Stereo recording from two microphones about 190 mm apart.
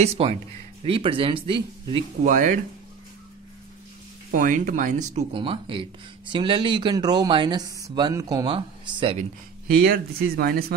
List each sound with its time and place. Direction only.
0.0 s speech: 35° right (ahead or behind)
2.2 s speech: 45° right (ahead or behind)
4.3 s speech: 45° right (ahead or behind)
5.3 s speech: 25° right (ahead or behind)
9.7 s speech: 50° right (ahead or behind)